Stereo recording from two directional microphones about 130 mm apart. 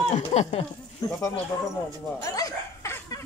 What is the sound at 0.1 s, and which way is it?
Speech, 55° left (ahead or behind).